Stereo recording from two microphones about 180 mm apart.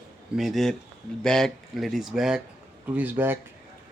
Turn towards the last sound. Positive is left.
turn(degrees=-10)  # may be behind; listen again after turning